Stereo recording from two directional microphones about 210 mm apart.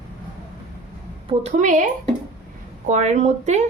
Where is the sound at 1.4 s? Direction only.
35° right (ahead or behind).